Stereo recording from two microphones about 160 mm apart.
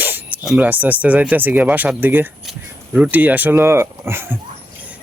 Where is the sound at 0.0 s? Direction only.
10° right (ahead or behind).